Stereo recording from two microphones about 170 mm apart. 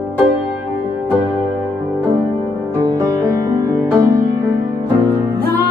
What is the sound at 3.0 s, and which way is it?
Music, 15° right (ahead or behind).